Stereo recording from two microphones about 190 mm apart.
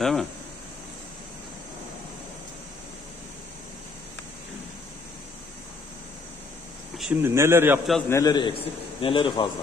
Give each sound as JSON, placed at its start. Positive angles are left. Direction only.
{"t": 0.0, "sound": "speech", "side_deg": 0}
{"t": 7.0, "sound": "a man's voice", "side_deg": -10}
{"t": 8.1, "sound": "a man's voice", "side_deg": 20}